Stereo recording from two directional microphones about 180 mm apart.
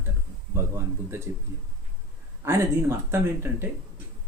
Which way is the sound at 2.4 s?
15° right (ahead or behind).